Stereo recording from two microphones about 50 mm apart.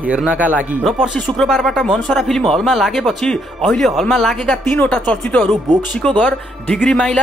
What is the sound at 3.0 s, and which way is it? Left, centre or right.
Speech, centre.